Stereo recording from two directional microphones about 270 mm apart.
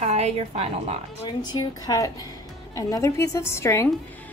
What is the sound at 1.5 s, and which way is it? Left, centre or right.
A woman's voice, centre.